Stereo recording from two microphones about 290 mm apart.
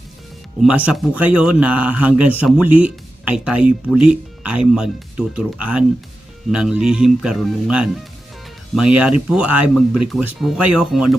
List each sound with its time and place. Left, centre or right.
0.9 s speech: centre